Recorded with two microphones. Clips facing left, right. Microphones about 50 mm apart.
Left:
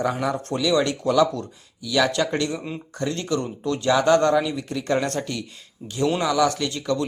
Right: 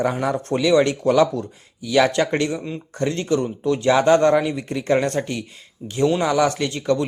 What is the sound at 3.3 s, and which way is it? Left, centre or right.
A man's voice, centre.